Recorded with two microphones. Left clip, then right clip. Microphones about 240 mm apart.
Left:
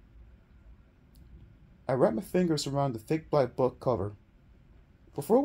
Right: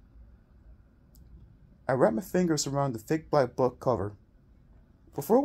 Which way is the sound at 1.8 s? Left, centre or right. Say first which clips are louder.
Right 2 dB; right.